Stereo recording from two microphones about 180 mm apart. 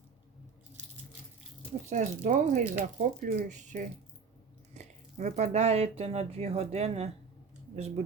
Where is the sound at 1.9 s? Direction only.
45° right (ahead or behind).